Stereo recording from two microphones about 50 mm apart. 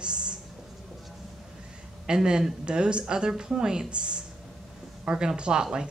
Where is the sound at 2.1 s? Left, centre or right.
Centre.